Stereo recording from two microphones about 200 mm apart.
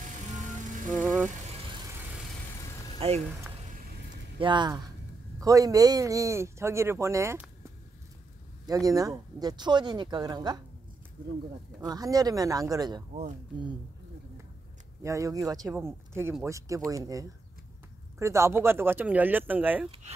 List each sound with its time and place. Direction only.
0.0 s music: 40° right (ahead or behind)
0.9 s vehicle: 5° left (ahead or behind)
3.0 s speech: 30° right (ahead or behind)
4.4 s speech: 25° right (ahead or behind)
8.6 s speech: 20° right (ahead or behind)
11.9 s speech: 20° right (ahead or behind)
15.0 s speech: 15° right (ahead or behind)